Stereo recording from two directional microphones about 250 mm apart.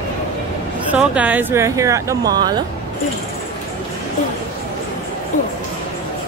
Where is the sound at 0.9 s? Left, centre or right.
Centre.